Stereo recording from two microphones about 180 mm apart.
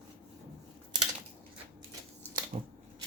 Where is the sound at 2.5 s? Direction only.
45° right (ahead or behind).